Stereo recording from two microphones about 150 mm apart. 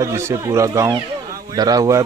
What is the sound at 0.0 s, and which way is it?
Speech, 20° right (ahead or behind).